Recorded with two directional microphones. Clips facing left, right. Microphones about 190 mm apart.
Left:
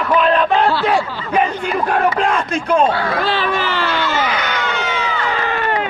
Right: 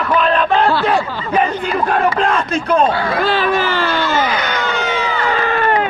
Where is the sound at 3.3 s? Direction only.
45° right (ahead or behind).